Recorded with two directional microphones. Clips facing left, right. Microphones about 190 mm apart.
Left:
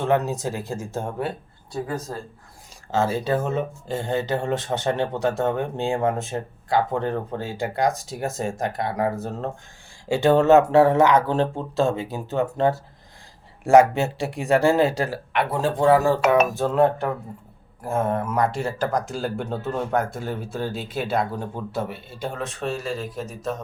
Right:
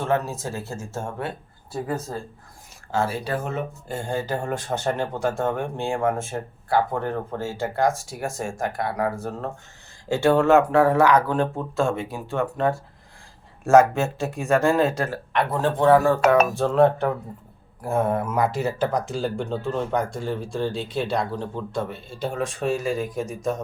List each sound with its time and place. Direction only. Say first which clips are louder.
0.0 s speech: left 3 dB; 15° left (ahead or behind)
1.7 s speech: even; 5° right (ahead or behind)
2.9 s speech: left 3 dB; 20° left (ahead or behind)
12.1 s speech: left 2 dB; 20° left (ahead or behind); by 22.2 s 5° left (ahead or behind)
22.6 s speech: right 3 dB; 15° right (ahead or behind)